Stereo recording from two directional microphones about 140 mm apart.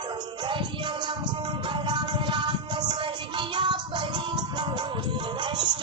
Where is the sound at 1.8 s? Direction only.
35° right (ahead or behind).